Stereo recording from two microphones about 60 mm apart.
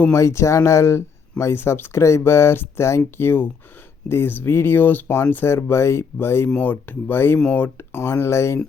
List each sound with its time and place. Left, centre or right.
0.1 s speech: left
6.6 s speech: left